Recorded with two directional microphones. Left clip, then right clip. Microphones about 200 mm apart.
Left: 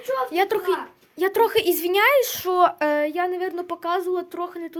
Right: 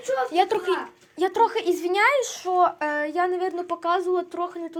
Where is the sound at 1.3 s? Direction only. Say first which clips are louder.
Left 2 dB; 35° left (ahead or behind).